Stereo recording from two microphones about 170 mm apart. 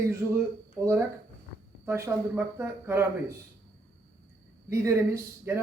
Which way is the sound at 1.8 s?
15° right (ahead or behind).